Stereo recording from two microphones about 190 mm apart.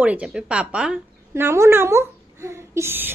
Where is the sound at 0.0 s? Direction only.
5° right (ahead or behind).